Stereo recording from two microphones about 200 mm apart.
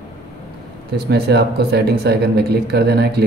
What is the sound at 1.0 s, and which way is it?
Speech, 55° right (ahead or behind).